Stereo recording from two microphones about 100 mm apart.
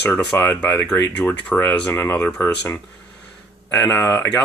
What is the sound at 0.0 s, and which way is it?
Speech, 20° left (ahead or behind).